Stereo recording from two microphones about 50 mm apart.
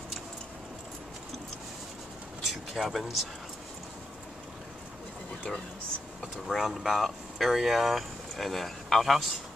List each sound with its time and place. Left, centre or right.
2.5 s speech: centre
6.2 s speech: centre